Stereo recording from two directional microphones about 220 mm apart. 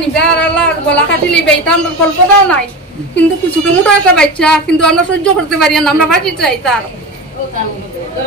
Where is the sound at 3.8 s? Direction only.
5° left (ahead or behind).